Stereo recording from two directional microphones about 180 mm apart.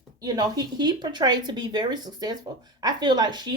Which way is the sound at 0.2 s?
20° right (ahead or behind).